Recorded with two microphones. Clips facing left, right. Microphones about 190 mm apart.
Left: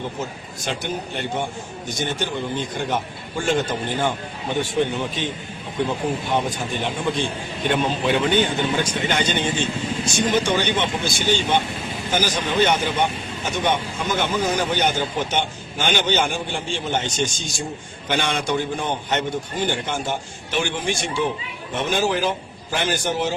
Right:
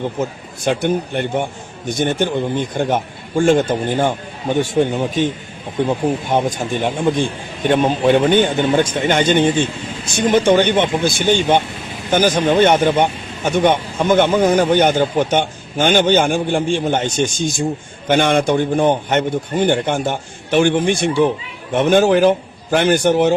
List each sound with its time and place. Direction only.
0.2 s a man's voice: 55° right (ahead or behind)